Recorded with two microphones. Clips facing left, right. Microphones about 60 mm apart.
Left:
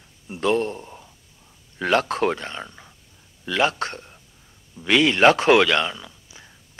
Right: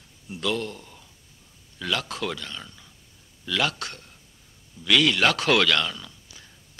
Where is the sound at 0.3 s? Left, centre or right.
Left.